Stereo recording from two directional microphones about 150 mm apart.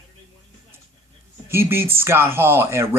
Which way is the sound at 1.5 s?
15° right (ahead or behind).